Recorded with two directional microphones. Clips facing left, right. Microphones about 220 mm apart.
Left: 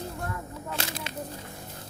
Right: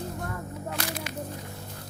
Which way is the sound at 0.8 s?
25° left (ahead or behind).